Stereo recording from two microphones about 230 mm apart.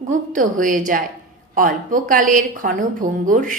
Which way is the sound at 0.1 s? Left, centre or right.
Right.